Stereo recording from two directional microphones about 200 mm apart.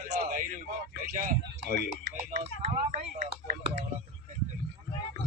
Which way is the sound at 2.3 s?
30° right (ahead or behind).